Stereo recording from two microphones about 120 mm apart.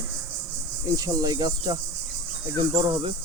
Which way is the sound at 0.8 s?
30° right (ahead or behind).